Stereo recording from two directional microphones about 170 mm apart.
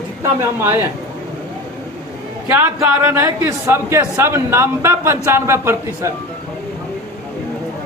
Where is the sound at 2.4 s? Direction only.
15° right (ahead or behind).